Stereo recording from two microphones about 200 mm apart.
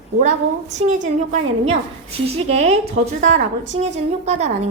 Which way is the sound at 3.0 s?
35° right (ahead or behind).